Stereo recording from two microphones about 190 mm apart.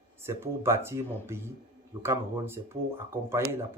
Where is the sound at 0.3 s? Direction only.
15° right (ahead or behind).